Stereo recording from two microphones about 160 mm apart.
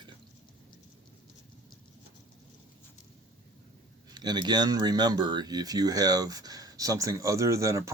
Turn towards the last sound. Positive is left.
turn(degrees=-20)  # may be behind; listen again after turning